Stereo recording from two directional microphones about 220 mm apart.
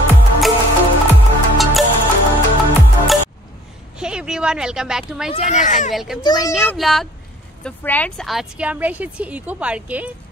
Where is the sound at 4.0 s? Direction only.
5° right (ahead or behind).